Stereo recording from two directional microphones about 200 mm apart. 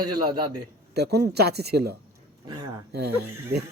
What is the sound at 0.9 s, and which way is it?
Speech, 55° right (ahead or behind).